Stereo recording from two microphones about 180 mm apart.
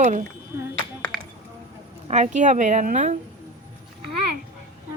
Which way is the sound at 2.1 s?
40° right (ahead or behind).